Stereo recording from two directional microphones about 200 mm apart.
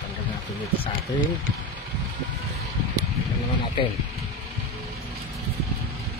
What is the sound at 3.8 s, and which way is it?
Speech, 25° left (ahead or behind).